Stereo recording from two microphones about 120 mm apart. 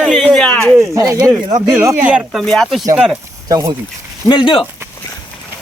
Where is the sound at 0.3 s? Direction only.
10° left (ahead or behind).